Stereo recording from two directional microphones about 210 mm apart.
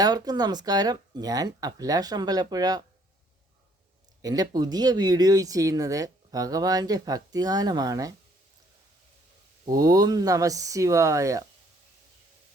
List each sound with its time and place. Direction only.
0.0 s speech: 20° right (ahead or behind)
4.2 s speech: 20° right (ahead or behind)
9.6 s speech: 20° right (ahead or behind)